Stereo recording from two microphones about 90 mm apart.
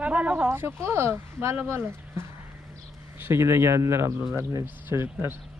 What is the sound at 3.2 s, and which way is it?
Speech, 25° right (ahead or behind).